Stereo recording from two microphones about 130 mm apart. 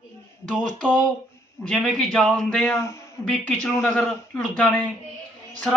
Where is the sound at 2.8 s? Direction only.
20° left (ahead or behind).